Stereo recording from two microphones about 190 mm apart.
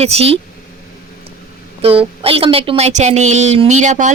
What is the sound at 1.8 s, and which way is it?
Speech, 30° right (ahead or behind).